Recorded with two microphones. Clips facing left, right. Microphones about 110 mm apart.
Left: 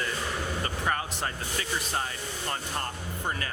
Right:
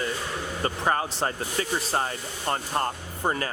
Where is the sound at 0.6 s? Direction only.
30° right (ahead or behind).